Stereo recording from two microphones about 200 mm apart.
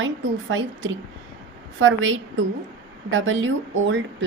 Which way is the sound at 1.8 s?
70° right (ahead or behind).